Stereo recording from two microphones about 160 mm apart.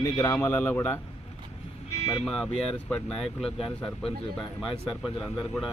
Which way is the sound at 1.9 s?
20° left (ahead or behind).